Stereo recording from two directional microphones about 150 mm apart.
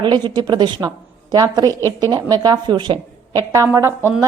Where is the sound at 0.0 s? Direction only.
30° right (ahead or behind).